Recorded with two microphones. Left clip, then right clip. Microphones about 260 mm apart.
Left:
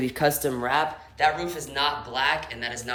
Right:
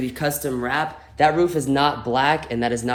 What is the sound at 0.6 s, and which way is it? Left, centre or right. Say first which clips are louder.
Speech: right 1 dB; centre.